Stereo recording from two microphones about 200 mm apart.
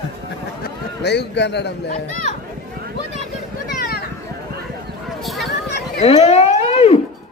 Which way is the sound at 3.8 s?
50° left (ahead or behind).